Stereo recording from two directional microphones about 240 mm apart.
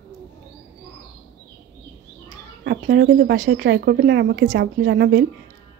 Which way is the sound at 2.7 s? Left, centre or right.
Right.